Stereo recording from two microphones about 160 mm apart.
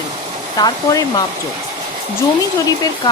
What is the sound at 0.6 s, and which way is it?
Speech, 25° left (ahead or behind).